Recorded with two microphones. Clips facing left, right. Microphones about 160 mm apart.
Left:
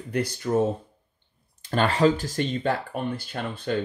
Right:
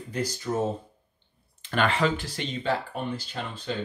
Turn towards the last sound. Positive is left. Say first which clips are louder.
# left 4 dB
turn(degrees=55)  # may be behind; listen again after turning